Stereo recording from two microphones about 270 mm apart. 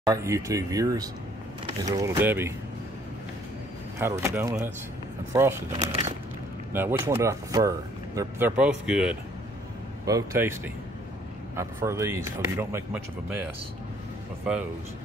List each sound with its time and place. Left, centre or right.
0.0 s speech: centre
4.0 s speech: centre
5.8 s a sound: right
6.7 s speech: centre